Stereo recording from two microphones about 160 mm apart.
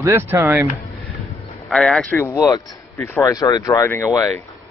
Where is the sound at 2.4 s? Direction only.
20° left (ahead or behind).